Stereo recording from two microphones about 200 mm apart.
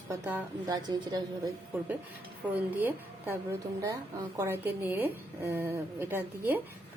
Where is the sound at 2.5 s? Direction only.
10° right (ahead or behind).